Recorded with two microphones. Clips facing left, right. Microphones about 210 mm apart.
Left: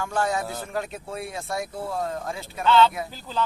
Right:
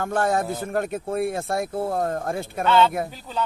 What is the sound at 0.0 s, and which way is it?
Speech, 55° right (ahead or behind).